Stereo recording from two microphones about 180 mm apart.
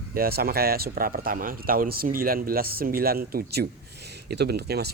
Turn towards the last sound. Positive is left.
turn(degrees=-65)  # may be behind; listen again after turning